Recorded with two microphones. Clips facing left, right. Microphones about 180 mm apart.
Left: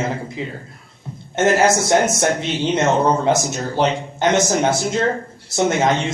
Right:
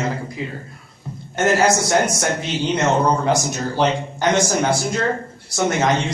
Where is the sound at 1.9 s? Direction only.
25° left (ahead or behind).